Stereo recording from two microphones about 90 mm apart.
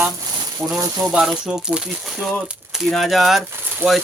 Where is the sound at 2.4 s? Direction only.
15° right (ahead or behind).